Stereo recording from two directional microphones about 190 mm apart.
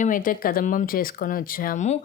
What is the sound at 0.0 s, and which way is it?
A woman's voice, 45° left (ahead or behind).